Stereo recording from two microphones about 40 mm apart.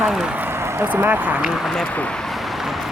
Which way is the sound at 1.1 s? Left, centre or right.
Right.